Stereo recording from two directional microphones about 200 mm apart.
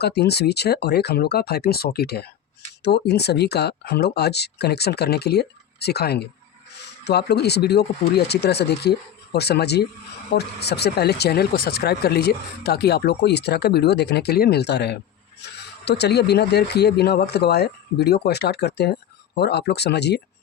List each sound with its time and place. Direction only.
0.0 s speech: 55° left (ahead or behind)